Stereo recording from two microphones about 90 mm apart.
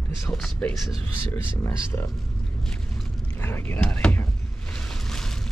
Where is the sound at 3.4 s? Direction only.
25° left (ahead or behind).